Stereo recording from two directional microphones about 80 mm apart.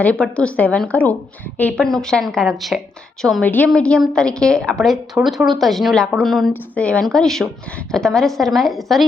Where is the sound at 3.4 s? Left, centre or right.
Centre.